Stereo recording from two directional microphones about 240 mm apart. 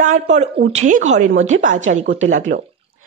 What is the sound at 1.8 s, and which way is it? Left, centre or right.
Speech, right.